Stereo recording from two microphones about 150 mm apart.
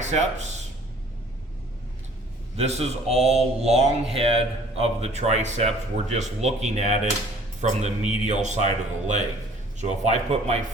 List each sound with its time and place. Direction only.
0.0 s speech: 50° right (ahead or behind)
2.6 s a man's voice: 45° right (ahead or behind)